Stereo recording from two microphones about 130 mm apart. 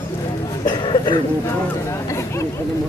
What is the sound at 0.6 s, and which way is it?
Speech, 35° left (ahead or behind).